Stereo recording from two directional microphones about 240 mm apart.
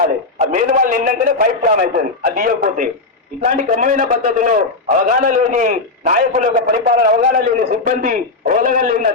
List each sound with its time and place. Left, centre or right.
0.3 s a man's voice: right